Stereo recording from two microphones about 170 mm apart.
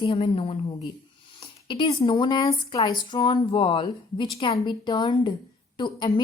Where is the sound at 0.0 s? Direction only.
30° left (ahead or behind).